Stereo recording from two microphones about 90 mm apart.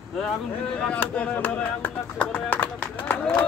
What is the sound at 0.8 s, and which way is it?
Speech, 15° left (ahead or behind).